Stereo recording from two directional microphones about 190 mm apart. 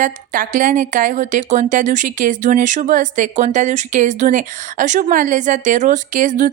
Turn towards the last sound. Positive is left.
turn(degrees=-40)  # may be behind; listen again after turning